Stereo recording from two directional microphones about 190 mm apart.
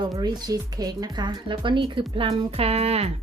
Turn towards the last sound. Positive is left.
turn(degrees=-35)  # may be behind; listen again after turning